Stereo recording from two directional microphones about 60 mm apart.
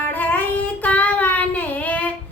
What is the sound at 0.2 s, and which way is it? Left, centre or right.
Child singing, left.